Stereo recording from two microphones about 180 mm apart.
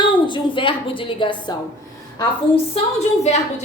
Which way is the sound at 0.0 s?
25° left (ahead or behind).